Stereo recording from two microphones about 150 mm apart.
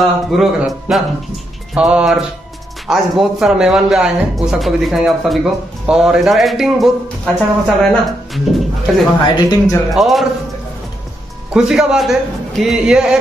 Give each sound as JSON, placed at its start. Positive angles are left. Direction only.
{"t": 0.0, "sound": "speech", "side_deg": 0}
{"t": 9.3, "sound": "speech", "side_deg": 25}
{"t": 9.8, "sound": "speech", "side_deg": 0}
{"t": 11.5, "sound": "speech", "side_deg": -5}